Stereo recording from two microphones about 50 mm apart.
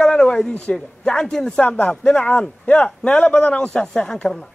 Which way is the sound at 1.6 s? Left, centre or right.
Left.